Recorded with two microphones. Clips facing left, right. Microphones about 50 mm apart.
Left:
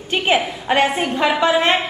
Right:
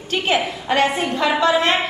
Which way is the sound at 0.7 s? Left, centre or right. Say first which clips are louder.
Left 1 dB; centre.